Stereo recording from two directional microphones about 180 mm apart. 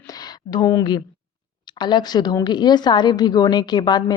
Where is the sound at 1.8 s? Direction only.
25° left (ahead or behind).